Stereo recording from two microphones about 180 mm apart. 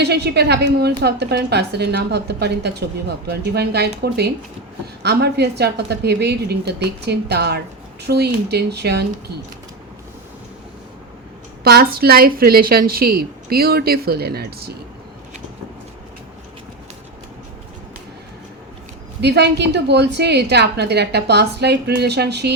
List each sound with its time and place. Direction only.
0.0 s a woman's voice: 65° right (ahead or behind)
11.6 s a woman's voice: 60° right (ahead or behind)
19.2 s a woman's voice: 70° right (ahead or behind)